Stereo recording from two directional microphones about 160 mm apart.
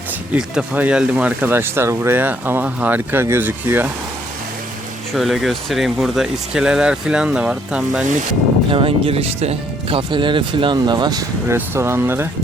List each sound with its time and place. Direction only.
0.3 s speech: 5° right (ahead or behind)
5.1 s speech: centre (ahead or behind)
8.7 s speech: 35° right (ahead or behind)
11.5 s speech: 15° right (ahead or behind)